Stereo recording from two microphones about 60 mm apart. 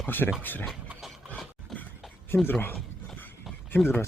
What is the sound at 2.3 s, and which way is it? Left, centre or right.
Speech, left.